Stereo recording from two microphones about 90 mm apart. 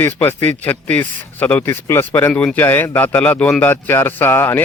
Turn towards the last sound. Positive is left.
turn(degrees=25)  # may be behind; listen again after turning